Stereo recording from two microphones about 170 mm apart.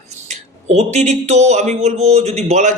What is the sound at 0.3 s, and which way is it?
Speech, 40° right (ahead or behind).